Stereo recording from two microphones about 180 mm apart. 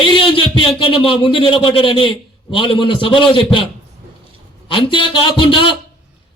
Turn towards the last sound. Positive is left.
turn(degrees=30)  # may be behind; listen again after turning